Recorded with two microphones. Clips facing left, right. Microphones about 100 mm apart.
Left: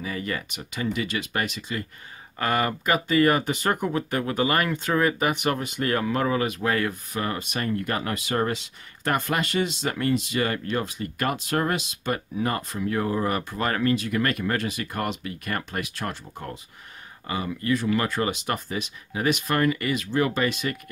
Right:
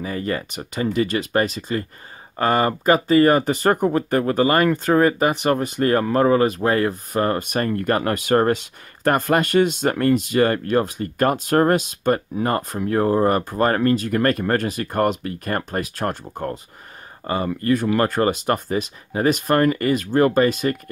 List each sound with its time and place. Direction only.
0.0 s speech: 40° right (ahead or behind)